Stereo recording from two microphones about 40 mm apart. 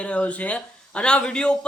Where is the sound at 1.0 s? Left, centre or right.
Left.